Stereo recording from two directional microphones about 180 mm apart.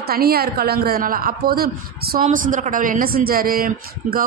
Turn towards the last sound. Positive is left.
turn(degrees=-55)  # may be behind; listen again after turning